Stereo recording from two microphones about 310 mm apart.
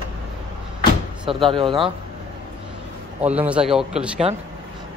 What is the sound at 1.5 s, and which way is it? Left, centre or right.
Speech, centre.